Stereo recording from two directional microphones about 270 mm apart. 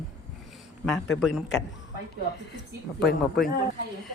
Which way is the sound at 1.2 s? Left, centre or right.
Centre.